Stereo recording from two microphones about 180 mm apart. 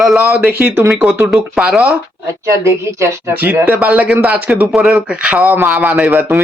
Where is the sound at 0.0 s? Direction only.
5° right (ahead or behind).